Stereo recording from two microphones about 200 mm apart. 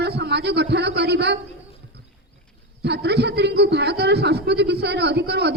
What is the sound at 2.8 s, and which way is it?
A man's voice, 55° right (ahead or behind).